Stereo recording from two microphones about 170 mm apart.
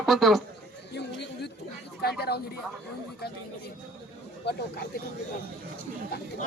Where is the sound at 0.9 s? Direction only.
85° left.